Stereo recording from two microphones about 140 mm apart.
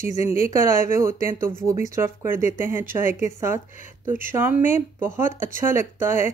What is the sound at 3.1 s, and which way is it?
Speech, 55° left (ahead or behind).